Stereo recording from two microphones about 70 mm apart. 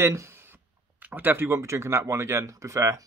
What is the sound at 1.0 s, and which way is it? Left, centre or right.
Speech, right.